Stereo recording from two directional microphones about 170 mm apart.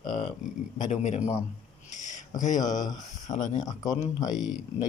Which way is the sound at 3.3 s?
45° left (ahead or behind).